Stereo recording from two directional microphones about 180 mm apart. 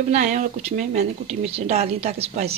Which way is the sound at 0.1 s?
40° right (ahead or behind).